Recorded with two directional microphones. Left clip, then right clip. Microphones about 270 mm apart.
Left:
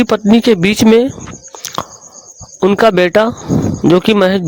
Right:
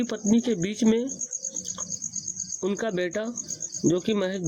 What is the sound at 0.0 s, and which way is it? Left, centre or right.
Speech, left.